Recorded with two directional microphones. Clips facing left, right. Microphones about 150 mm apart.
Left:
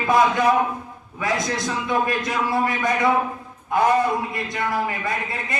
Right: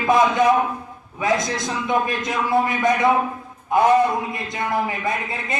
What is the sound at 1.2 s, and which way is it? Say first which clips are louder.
A man's voice: right 2 dB; 20° right (ahead or behind).